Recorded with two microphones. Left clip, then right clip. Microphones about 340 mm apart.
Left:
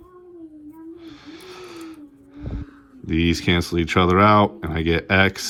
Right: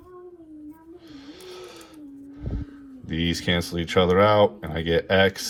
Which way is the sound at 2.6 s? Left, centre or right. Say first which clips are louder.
Even; centre.